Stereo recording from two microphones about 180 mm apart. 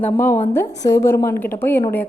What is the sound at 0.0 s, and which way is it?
Speech, 10° left (ahead or behind).